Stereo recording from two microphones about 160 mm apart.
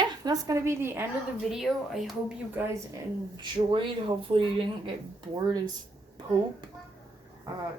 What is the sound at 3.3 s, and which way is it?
Speech, 30° right (ahead or behind).